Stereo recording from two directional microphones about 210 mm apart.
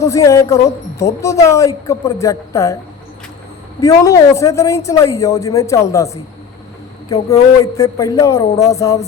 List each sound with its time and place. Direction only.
0.0 s a woman's voice: 15° left (ahead or behind)
3.8 s a woman's voice: 15° left (ahead or behind)